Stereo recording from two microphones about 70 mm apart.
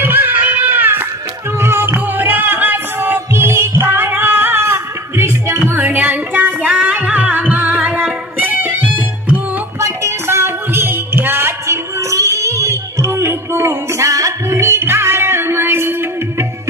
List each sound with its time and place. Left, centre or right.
0.0 s music: right
2.0 s music: right
5.7 s music: right
9.8 s a sound: right